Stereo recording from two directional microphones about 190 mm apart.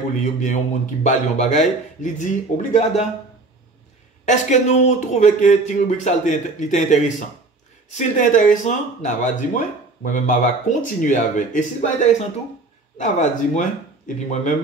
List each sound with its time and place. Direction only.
0.2 s a man's voice: 40° left (ahead or behind)
4.3 s a man's voice: 40° left (ahead or behind)
8.2 s a man's voice: 45° left (ahead or behind)